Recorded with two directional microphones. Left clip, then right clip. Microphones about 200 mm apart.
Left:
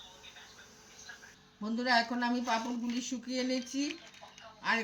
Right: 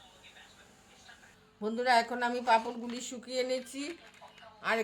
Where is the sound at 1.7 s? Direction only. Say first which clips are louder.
Right 2 dB; 60° right (ahead or behind).